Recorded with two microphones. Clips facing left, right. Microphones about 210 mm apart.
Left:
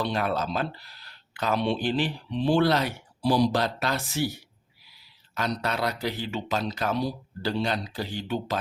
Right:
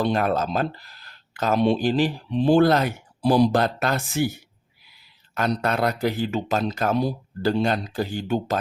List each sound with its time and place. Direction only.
0.0 s speech: 50° right (ahead or behind)